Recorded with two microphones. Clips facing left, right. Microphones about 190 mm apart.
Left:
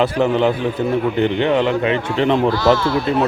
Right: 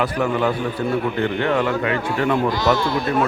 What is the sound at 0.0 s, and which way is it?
Speech, 25° left (ahead or behind).